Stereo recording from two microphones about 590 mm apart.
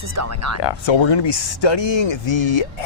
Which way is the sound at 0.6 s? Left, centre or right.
Left.